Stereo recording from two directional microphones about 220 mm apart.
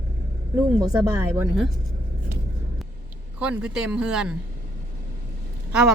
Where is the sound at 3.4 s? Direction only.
5° right (ahead or behind).